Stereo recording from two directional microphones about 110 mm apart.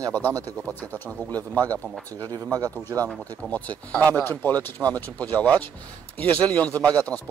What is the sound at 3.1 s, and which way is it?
Speech, 10° left (ahead or behind).